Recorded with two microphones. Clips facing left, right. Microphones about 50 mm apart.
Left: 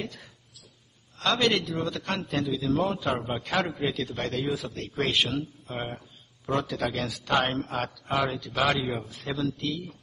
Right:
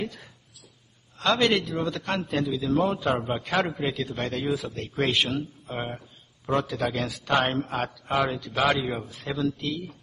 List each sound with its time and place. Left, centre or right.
1.2 s a man's voice: centre
7.1 s a man's voice: centre
7.4 s a man's voice: centre